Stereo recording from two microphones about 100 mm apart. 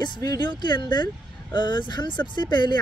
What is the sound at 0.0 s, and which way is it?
Speech, 45° left (ahead or behind).